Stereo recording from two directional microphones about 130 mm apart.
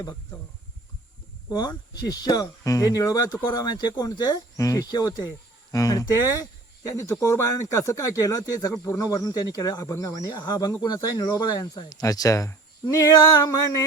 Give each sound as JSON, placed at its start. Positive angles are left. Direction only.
{"t": 1.5, "sound": "speech", "side_deg": 35}